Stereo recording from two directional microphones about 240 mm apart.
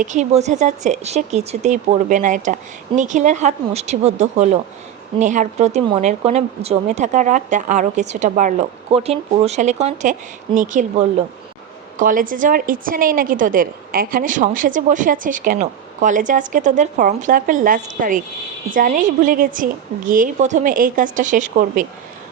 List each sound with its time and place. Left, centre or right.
0.0 s a woman's voice: right